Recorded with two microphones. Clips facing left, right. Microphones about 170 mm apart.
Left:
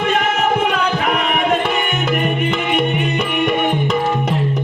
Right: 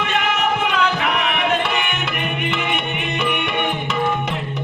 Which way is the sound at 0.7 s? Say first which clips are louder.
Left 2 dB; 45° left (ahead or behind).